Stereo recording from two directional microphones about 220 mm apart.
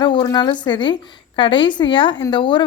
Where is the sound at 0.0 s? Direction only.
20° left (ahead or behind).